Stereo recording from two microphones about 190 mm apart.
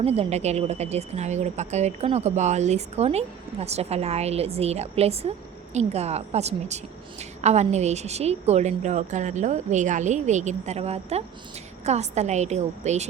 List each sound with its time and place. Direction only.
0.0 s a woman's voice: 30° right (ahead or behind)